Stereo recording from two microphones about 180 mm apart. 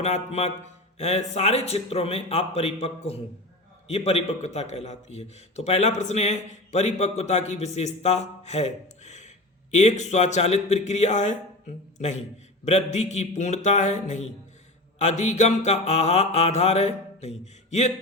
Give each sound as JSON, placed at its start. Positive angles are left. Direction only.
{"t": 0.0, "sound": "a man's voice", "side_deg": 35}